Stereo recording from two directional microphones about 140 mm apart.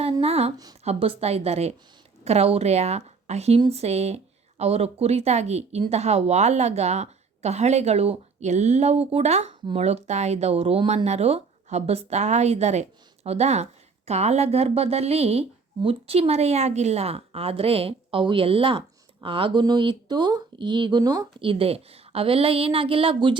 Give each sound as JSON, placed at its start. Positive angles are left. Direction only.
{"t": 0.0, "sound": "a sound", "side_deg": -45}
{"t": 0.9, "sound": "speech", "side_deg": -45}
{"t": 21.4, "sound": "speech", "side_deg": -40}